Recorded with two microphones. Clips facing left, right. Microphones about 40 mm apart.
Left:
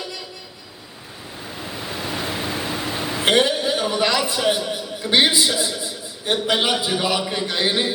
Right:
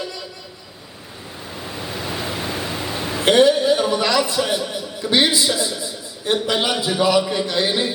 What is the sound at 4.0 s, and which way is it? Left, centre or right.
A woman's voice, centre.